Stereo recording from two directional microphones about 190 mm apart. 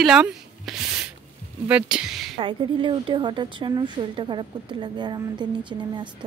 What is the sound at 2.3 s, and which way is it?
A woman's voice, 25° right (ahead or behind).